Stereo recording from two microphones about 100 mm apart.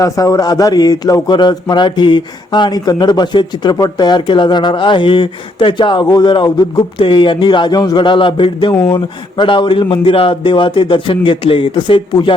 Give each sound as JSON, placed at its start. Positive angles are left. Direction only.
{"t": 0.0, "sound": "speech", "side_deg": 35}
{"t": 7.0, "sound": "a man's voice", "side_deg": 55}